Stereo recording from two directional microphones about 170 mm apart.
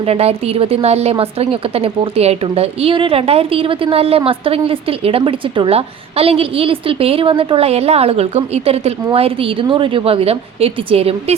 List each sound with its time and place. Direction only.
0.0 s a woman's voice: 35° right (ahead or behind)